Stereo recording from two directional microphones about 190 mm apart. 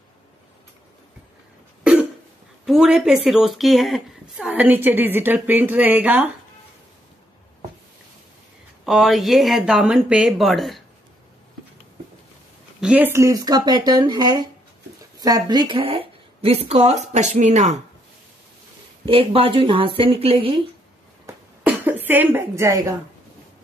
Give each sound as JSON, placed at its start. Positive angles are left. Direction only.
{"t": 2.6, "sound": "a woman's voice", "side_deg": 0}
{"t": 8.8, "sound": "speech", "side_deg": 0}
{"t": 12.8, "sound": "speech", "side_deg": -10}
{"t": 19.0, "sound": "speech", "side_deg": -30}
{"t": 21.3, "sound": "a sound", "side_deg": -10}